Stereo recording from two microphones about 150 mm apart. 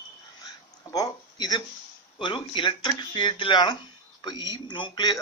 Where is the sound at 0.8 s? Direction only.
25° left (ahead or behind).